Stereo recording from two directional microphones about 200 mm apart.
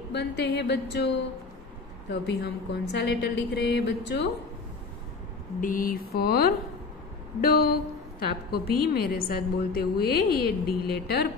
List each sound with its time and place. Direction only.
0.1 s a woman's voice: 55° left (ahead or behind)
5.6 s a woman's voice: 45° left (ahead or behind)